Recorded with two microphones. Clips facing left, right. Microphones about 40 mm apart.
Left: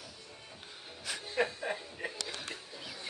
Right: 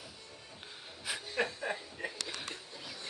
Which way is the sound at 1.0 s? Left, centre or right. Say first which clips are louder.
Even; centre.